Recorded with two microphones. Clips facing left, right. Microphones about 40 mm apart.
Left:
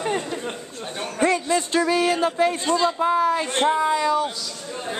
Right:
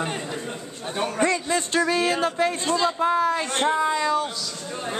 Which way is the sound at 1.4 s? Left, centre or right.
Centre.